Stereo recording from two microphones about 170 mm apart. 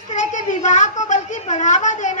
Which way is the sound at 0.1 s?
45° left (ahead or behind).